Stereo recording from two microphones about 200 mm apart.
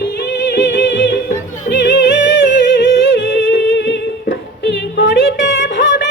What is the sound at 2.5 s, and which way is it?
Humming, 65° left (ahead or behind).